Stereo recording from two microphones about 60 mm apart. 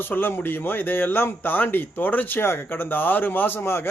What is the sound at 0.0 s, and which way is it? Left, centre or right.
Speech, left.